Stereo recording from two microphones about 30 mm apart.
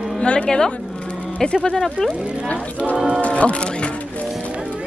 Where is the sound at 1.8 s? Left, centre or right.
Centre.